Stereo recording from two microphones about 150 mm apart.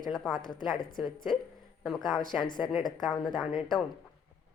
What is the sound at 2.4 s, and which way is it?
Speech, 30° left (ahead or behind).